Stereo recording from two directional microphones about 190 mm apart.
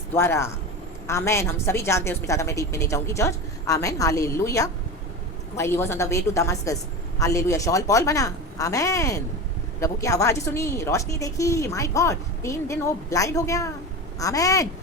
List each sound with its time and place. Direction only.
0.1 s a woman's voice: 15° left (ahead or behind)